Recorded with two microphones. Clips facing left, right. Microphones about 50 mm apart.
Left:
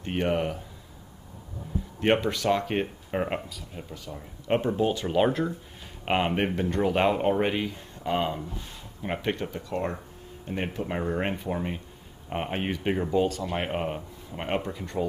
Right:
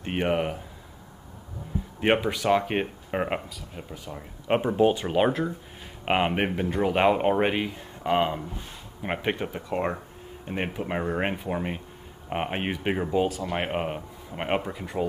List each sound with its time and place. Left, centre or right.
0.0 s speech: centre
2.0 s speech: centre
3.4 s speech: centre
4.1 s speech: centre